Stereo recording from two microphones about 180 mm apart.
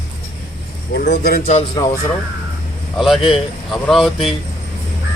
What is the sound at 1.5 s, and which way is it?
Speech, 35° left (ahead or behind).